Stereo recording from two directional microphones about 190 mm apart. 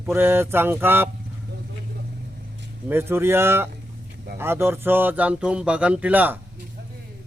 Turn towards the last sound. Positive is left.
turn(degrees=-10)  # may be behind; listen again after turning